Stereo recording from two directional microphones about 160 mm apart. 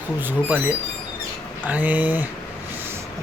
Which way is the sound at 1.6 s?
10° right (ahead or behind).